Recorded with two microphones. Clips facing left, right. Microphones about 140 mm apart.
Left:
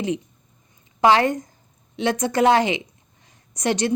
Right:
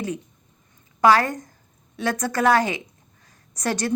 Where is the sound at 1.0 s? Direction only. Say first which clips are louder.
Left 1 dB; 20° left (ahead or behind).